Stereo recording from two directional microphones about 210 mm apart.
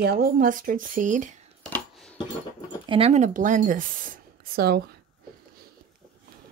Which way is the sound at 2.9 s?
30° right (ahead or behind).